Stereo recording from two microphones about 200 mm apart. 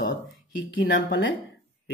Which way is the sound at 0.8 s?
70° left (ahead or behind).